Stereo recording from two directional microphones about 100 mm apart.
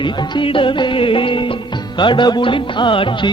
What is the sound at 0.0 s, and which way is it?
Music, 55° left (ahead or behind).